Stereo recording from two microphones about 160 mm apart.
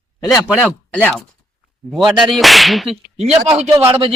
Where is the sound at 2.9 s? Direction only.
40° right (ahead or behind).